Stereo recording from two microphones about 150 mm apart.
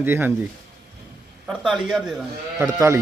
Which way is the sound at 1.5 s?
Centre (ahead or behind).